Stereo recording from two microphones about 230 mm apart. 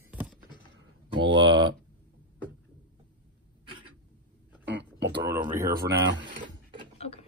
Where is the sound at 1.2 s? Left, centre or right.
Right.